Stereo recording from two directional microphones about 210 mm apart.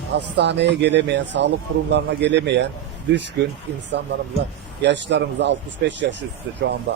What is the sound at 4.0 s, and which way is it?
A man's voice, 55° right (ahead or behind).